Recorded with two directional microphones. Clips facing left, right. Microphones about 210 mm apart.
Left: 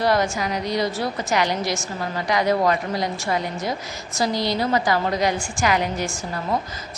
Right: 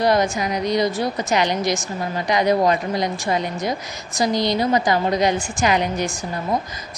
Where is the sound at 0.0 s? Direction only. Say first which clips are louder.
Right 2 dB; 20° right (ahead or behind).